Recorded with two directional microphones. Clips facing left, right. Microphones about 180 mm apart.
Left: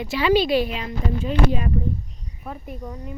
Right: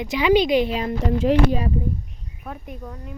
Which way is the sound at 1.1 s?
75° right (ahead or behind).